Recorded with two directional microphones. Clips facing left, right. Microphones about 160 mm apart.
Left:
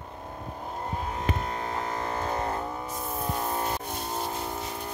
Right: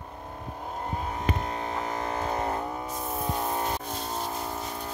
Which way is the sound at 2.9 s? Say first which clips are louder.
Right 1 dB; centre (ahead or behind).